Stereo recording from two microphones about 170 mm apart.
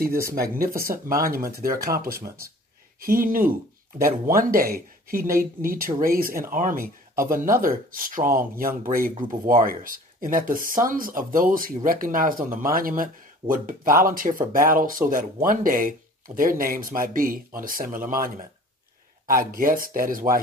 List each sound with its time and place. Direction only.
0.4 s speech: 60° right (ahead or behind)